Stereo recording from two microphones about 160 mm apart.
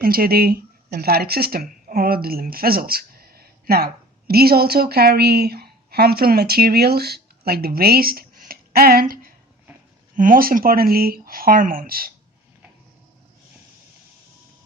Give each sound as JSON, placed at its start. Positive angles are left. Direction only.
{"t": 0.0, "sound": "speech", "side_deg": -70}